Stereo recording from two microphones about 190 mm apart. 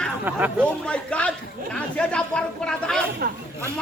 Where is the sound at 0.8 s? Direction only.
5° left (ahead or behind).